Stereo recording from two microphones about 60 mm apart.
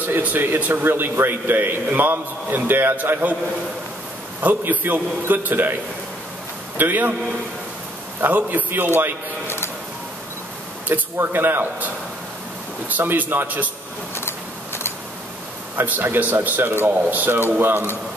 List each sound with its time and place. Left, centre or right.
0.0 s a man's voice: right
4.4 s a man's voice: right
6.8 s a man's voice: right
8.2 s a man's voice: right
10.9 s a man's voice: right
14.1 s a sound: left
15.7 s a man's voice: right
16.9 s a man's voice: right